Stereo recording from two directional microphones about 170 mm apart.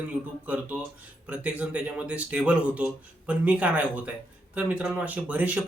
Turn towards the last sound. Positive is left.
turn(degrees=-10)  # may be behind; listen again after turning